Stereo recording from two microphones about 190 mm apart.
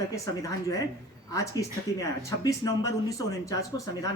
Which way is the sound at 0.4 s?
20° left (ahead or behind).